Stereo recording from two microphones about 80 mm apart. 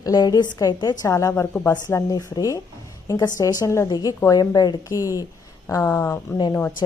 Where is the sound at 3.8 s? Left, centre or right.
Left.